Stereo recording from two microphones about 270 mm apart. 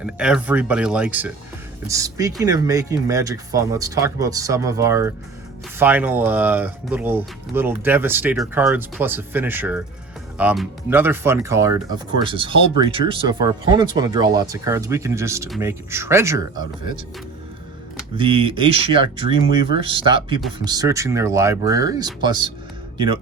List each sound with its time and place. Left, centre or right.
0.0 s speech: centre
18.2 s speech: centre